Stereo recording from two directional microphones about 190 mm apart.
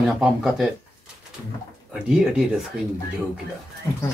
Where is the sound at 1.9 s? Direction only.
5° right (ahead or behind).